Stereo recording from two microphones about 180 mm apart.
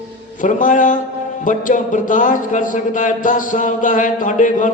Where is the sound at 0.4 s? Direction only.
45° left (ahead or behind).